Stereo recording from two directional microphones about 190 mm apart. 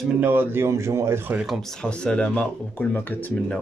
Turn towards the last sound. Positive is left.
turn(degrees=5)  # may be behind; listen again after turning